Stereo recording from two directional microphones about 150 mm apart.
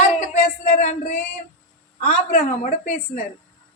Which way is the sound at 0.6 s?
50° left (ahead or behind).